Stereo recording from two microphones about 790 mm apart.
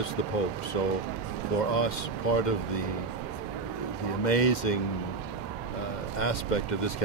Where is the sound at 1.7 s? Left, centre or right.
Left.